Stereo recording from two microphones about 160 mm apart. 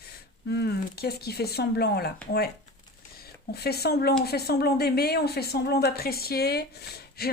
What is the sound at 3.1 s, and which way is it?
Speech, 75° left (ahead or behind).